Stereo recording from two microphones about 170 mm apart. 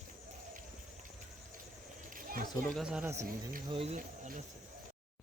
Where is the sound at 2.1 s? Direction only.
55° right (ahead or behind).